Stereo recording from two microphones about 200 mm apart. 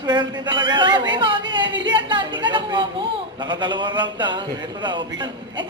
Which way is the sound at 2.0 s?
25° right (ahead or behind).